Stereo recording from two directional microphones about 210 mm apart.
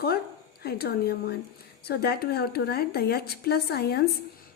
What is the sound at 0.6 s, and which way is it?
A woman's voice, 50° left (ahead or behind).